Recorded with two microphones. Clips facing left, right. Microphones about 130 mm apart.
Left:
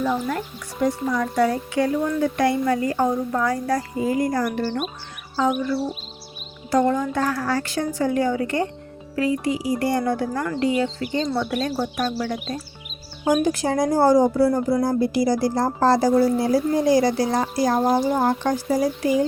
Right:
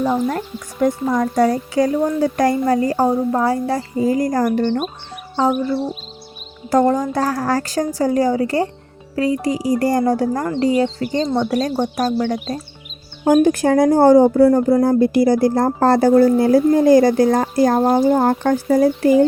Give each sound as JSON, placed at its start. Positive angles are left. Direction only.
{"t": 0.0, "sound": "speech", "side_deg": -35}
{"t": 0.8, "sound": "speech", "side_deg": -45}
{"t": 6.7, "sound": "speech", "side_deg": -45}
{"t": 13.2, "sound": "speech", "side_deg": -50}